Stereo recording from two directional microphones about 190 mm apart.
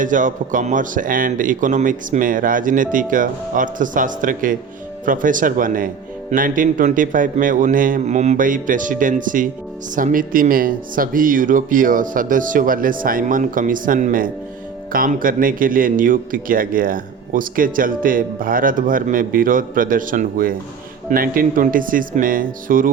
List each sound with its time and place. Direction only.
0.0 s a man's voice: 45° right (ahead or behind)